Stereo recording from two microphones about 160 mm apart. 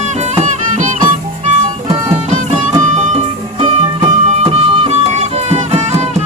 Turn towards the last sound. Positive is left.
turn(degrees=-45)  # may be behind; listen again after turning